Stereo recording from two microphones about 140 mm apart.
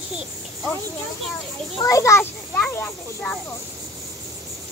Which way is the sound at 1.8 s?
25° left (ahead or behind).